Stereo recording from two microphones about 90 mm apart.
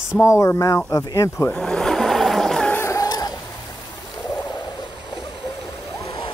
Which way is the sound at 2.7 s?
30° left (ahead or behind).